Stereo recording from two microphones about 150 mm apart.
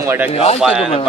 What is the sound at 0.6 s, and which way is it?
Speech, 5° right (ahead or behind).